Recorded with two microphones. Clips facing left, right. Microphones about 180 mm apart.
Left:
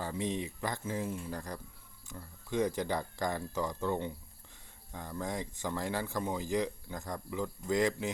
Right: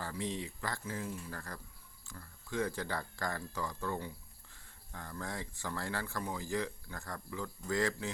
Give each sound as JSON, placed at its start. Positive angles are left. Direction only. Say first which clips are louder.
{"t": 0.0, "sound": "speech", "louder": "left 4 dB", "side_deg": 20}